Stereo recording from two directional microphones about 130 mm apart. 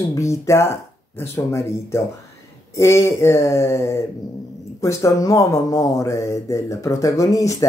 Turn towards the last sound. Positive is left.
turn(degrees=25)  # may be behind; listen again after turning